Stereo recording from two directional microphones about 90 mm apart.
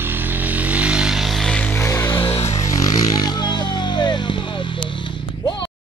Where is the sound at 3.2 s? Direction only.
55° left (ahead or behind).